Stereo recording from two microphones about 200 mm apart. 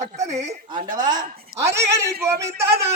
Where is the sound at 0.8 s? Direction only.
40° right (ahead or behind).